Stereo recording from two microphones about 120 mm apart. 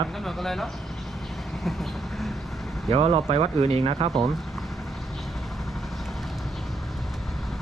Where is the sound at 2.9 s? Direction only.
55° right (ahead or behind).